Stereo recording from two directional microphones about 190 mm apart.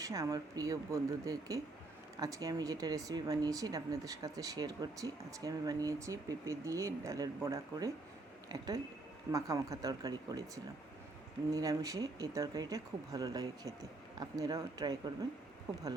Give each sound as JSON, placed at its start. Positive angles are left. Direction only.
{"t": 0.0, "sound": "speech", "side_deg": -15}